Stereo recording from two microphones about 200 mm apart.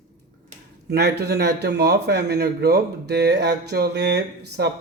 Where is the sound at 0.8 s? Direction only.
55° right (ahead or behind).